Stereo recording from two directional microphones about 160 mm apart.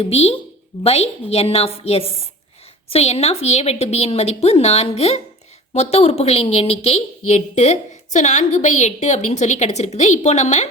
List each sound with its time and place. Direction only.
0.0 s a woman's voice: 40° left (ahead or behind)